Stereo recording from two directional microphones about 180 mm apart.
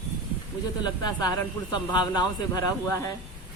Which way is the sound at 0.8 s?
20° left (ahead or behind).